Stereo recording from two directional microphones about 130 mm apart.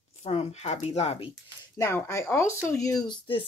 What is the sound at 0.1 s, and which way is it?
Speech, 55° left (ahead or behind).